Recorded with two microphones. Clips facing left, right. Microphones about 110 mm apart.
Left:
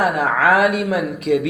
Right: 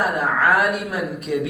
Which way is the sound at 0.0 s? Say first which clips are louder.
Left 3 dB; centre (ahead or behind).